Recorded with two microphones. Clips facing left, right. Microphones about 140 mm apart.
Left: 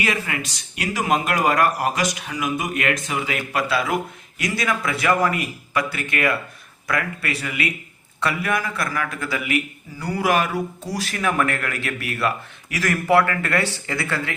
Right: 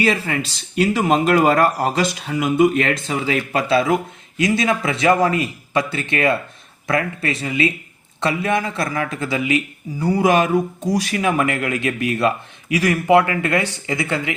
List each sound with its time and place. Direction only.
0.0 s a man's voice: 30° right (ahead or behind)